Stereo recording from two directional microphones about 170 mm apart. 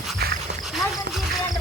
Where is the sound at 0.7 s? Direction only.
Centre (ahead or behind).